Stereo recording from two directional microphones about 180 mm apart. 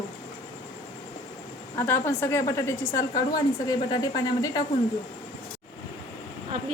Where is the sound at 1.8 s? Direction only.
15° left (ahead or behind).